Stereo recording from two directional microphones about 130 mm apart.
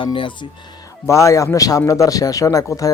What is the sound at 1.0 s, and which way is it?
Speech, 25° left (ahead or behind).